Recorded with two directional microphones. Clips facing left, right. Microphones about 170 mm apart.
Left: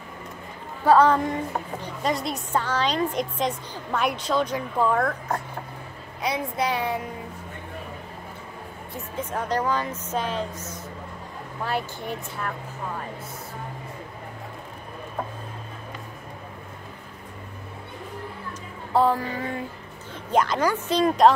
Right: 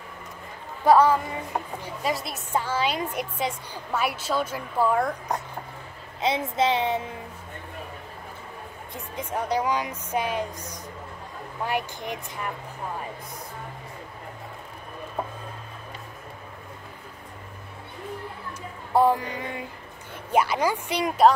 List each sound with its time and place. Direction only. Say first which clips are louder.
0.8 s a woman's voice: left 1 dB; 10° right (ahead or behind)
6.2 s speech: right 3 dB; 25° right (ahead or behind)
8.9 s a woman's voice: left 1 dB; 10° right (ahead or behind)
18.9 s a woman's voice: even; 15° right (ahead or behind)